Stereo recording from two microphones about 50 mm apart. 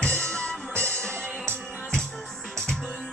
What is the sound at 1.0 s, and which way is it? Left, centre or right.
Music, right.